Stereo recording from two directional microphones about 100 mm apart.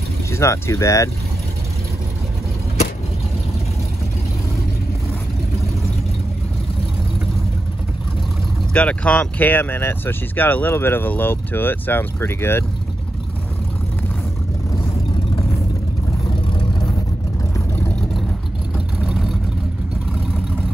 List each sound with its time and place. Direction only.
0.3 s speech: 30° left (ahead or behind)
8.7 s speech: 15° left (ahead or behind)
18.9 s vehicle: 5° right (ahead or behind)